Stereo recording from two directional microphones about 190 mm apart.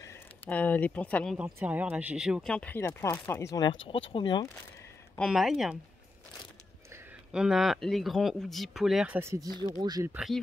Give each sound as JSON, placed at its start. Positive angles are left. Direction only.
{"t": 0.0, "sound": "speech", "side_deg": 10}
{"t": 1.4, "sound": "speech", "side_deg": -10}
{"t": 5.1, "sound": "speech", "side_deg": 0}
{"t": 7.3, "sound": "speech", "side_deg": 0}
{"t": 10.1, "sound": "speech", "side_deg": 0}